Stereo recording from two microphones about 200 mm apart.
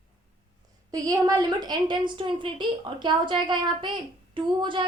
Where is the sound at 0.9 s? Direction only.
20° right (ahead or behind).